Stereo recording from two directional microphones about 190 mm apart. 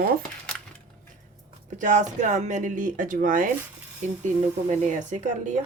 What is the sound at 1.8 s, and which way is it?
Speech, 40° right (ahead or behind).